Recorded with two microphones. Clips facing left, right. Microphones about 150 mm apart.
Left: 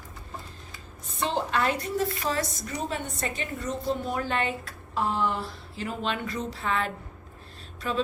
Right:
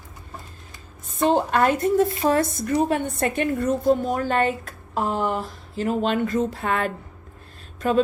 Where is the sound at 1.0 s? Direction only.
45° right (ahead or behind).